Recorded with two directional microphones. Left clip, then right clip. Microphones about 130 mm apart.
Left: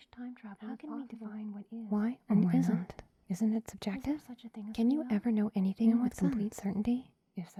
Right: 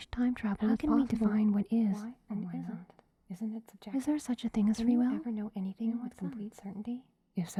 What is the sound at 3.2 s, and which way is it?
Speech, 40° left (ahead or behind).